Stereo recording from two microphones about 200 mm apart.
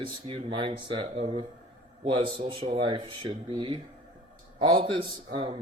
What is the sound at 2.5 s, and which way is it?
Speech, 25° right (ahead or behind).